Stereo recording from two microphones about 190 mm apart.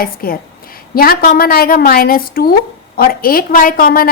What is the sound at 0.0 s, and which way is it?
A woman's voice, 50° left (ahead or behind).